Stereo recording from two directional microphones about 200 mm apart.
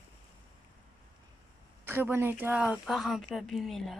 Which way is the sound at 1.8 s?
10° right (ahead or behind).